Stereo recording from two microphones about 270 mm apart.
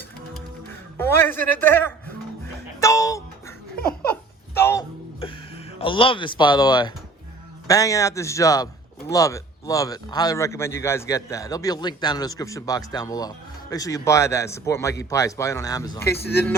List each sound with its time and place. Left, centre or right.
0.7 s speech: centre
2.8 s music: centre
4.1 s a sound: centre
5.8 s a man's voice: centre